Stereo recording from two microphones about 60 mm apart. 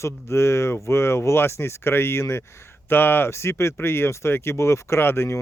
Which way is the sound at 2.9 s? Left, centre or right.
Left.